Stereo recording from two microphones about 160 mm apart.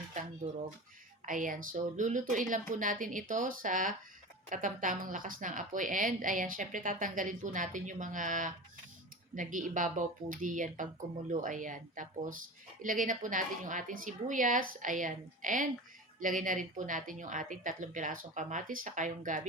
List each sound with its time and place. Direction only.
1.2 s a woman's voice: 55° right (ahead or behind)